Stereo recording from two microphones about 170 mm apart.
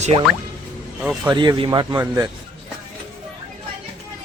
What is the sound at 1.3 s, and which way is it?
Speech, 25° right (ahead or behind).